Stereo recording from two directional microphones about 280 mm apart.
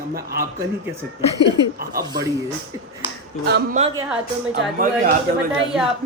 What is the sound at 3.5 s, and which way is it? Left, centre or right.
Speech, right.